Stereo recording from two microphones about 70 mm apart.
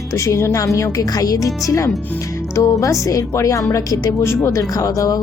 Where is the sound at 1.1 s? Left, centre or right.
Left.